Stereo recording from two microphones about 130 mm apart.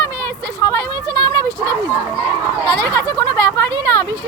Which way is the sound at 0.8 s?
30° right (ahead or behind).